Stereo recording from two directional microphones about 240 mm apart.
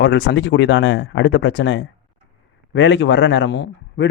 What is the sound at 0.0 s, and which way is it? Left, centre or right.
A man's voice, left.